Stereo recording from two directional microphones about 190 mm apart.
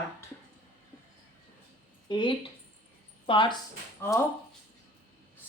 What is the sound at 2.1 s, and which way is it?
Speech, 25° left (ahead or behind).